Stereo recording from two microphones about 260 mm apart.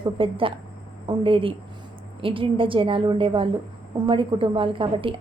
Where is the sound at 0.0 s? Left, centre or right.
Centre.